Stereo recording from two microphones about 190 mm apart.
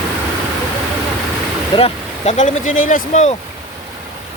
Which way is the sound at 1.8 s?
35° left (ahead or behind).